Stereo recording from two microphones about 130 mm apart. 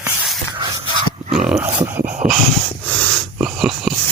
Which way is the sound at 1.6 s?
15° right (ahead or behind).